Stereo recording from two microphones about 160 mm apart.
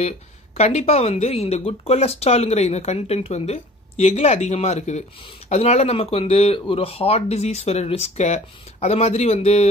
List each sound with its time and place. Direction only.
0.6 s speech: 40° left (ahead or behind)